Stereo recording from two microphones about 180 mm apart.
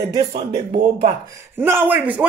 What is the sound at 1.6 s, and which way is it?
Speech, 10° right (ahead or behind).